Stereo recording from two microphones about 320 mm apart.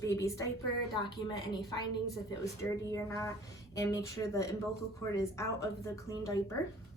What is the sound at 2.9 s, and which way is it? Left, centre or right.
A woman's voice, centre.